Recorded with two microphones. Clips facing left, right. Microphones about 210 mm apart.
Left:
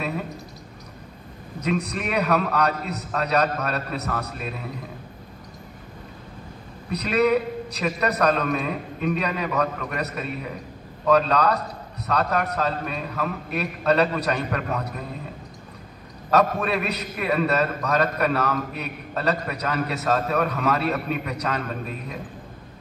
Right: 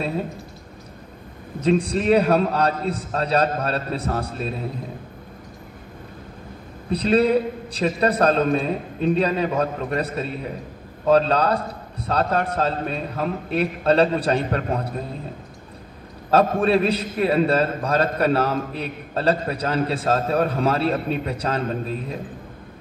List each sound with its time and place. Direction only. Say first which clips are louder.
1.6 s a man's voice: right 6 dB; 30° right (ahead or behind)
6.9 s a man's voice: right 3 dB; 30° right (ahead or behind)
16.3 s a man's voice: right 3 dB; 30° right (ahead or behind)